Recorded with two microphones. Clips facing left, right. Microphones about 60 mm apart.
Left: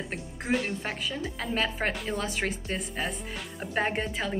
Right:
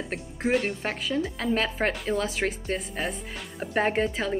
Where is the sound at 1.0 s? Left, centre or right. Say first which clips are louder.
Right 5 dB; right.